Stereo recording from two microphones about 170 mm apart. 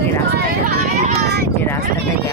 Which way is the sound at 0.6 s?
60° right (ahead or behind).